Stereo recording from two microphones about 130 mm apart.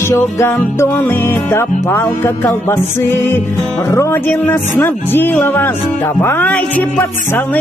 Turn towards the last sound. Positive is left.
turn(degrees=15)  # may be behind; listen again after turning